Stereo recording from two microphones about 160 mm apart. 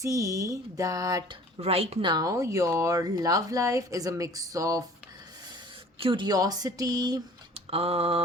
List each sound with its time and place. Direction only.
0.0 s speech: 20° right (ahead or behind)
1.5 s speech: 40° right (ahead or behind); by 4.8 s 20° right (ahead or behind)
6.0 s speech: 30° right (ahead or behind)
7.5 s a sound: 40° right (ahead or behind)